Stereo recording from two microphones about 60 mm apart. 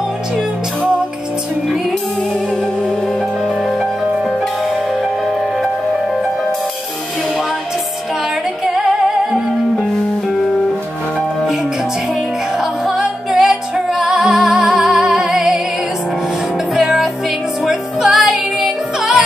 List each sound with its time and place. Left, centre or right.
8.6 s music: centre
12.5 s music: centre
16.7 s music: centre